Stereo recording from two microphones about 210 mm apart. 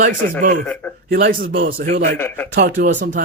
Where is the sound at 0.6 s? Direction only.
5° left (ahead or behind).